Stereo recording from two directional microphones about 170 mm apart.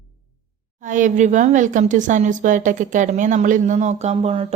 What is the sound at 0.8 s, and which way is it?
A woman's voice, 50° right (ahead or behind).